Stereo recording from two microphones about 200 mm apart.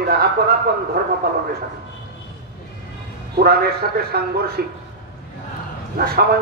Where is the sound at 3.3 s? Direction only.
55° right (ahead or behind).